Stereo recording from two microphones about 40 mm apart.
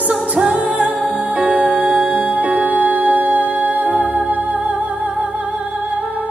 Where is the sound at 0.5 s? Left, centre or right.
Right.